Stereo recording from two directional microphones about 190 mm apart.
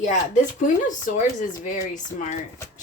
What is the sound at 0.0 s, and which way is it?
Speech, 40° left (ahead or behind).